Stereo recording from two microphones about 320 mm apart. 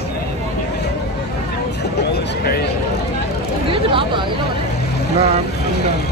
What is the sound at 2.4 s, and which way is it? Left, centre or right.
Speech, left.